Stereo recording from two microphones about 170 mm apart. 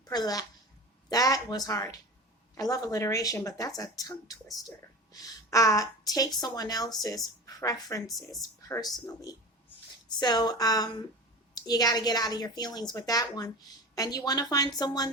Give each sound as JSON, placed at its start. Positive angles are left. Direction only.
{"t": 0.0, "sound": "speech", "side_deg": 25}
{"t": 8.0, "sound": "speech", "side_deg": 0}
{"t": 8.4, "sound": "speech", "side_deg": 20}